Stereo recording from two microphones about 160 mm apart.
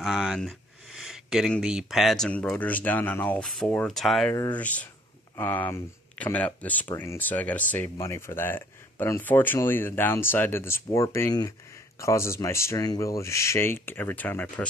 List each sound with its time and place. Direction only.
0.0 s a sound: centre (ahead or behind)
1.6 s speech: 5° right (ahead or behind)
4.3 s speech: 20° left (ahead or behind)
4.6 s speech: 10° left (ahead or behind)